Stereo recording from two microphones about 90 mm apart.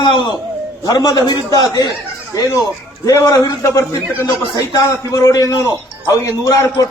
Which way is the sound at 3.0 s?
40° left (ahead or behind).